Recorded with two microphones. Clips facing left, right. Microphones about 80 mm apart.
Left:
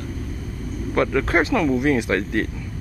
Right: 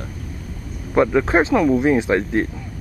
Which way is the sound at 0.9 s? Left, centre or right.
Centre.